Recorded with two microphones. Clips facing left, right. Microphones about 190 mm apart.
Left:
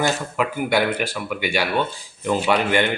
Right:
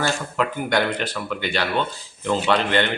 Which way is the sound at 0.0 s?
10° left (ahead or behind).